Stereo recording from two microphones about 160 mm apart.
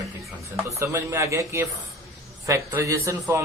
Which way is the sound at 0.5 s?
15° right (ahead or behind).